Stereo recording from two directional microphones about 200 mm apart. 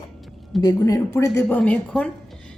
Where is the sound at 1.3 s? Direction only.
5° left (ahead or behind).